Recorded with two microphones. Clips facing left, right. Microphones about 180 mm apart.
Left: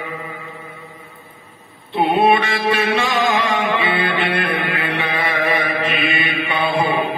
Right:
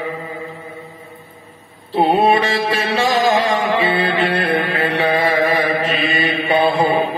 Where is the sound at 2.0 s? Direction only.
30° right (ahead or behind).